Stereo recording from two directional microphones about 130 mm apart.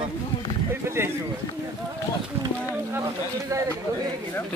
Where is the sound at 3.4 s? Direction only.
20° right (ahead or behind).